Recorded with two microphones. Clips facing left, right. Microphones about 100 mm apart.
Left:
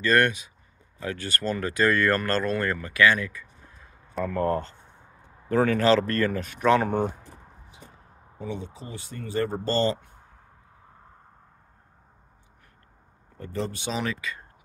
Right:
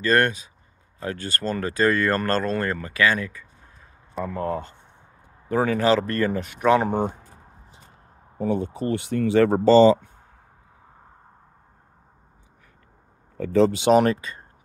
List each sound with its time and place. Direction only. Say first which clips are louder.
0.0 s speech: right 1 dB; 35° right (ahead or behind)
4.4 s speech: left 3 dB; 5° right (ahead or behind)
5.2 s speech: even; 15° right (ahead or behind)
8.4 s speech: right 10 dB; 50° right (ahead or behind); by 9.6 s 85° right
13.5 s speech: right 14 dB; 90° right; by 14.2 s 55° right (ahead or behind)